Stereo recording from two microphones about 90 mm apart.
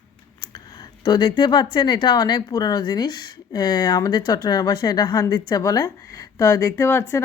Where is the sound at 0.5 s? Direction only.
55° left (ahead or behind).